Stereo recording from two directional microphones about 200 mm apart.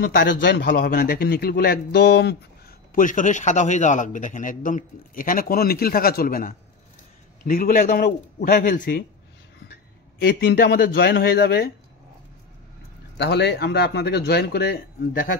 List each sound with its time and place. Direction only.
0.0 s a man's voice: 45° left (ahead or behind)
2.9 s a man's voice: 40° left (ahead or behind)
10.2 s a man's voice: 50° left (ahead or behind)
13.2 s speech: 55° left (ahead or behind)